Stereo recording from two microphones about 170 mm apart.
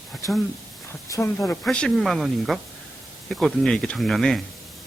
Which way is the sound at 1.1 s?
15° left (ahead or behind).